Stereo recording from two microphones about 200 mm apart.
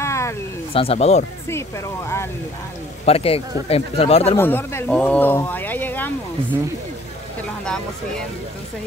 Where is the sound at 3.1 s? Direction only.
30° left (ahead or behind).